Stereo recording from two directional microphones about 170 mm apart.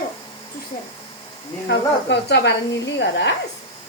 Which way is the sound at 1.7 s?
85° left.